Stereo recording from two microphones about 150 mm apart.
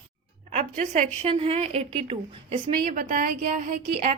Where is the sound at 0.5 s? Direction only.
55° right (ahead or behind).